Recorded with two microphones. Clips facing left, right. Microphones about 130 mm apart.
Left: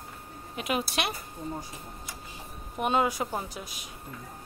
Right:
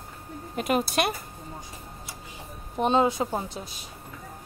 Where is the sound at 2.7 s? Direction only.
25° right (ahead or behind).